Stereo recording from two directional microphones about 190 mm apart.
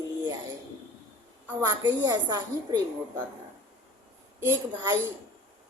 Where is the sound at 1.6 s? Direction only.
20° right (ahead or behind).